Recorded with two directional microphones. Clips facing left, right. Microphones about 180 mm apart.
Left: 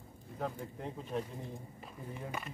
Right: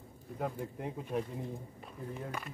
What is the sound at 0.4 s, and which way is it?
Speech, 5° right (ahead or behind).